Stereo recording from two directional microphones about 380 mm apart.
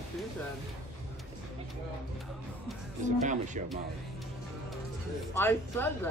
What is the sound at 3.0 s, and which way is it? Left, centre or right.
Speech, centre.